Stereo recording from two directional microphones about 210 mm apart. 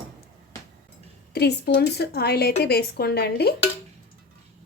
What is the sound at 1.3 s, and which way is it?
Speech, 50° left (ahead or behind).